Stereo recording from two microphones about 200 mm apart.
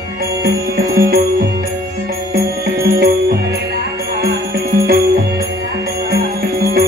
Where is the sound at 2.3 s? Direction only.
50° right (ahead or behind).